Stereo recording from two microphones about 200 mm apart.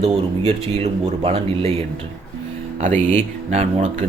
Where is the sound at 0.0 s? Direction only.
30° right (ahead or behind).